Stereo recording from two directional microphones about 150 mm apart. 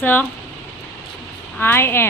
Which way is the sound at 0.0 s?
10° left (ahead or behind).